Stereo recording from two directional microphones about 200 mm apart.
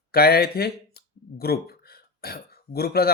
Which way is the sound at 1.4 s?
50° left (ahead or behind).